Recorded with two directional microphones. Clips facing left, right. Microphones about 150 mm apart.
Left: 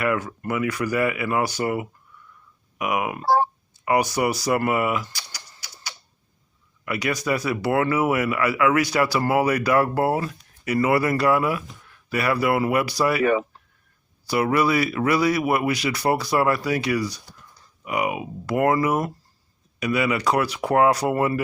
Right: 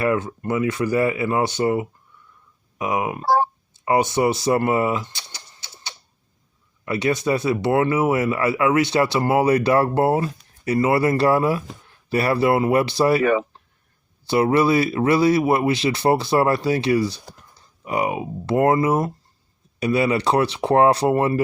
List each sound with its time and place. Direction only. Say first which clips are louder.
0.0 s speech: right 3 dB; 25° right (ahead or behind)